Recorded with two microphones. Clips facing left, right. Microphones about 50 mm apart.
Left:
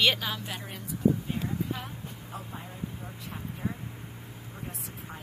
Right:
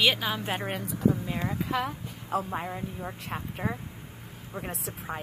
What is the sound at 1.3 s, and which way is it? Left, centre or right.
Speech, right.